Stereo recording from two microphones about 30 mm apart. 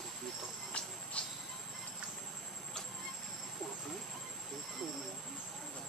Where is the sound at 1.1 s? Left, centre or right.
Left.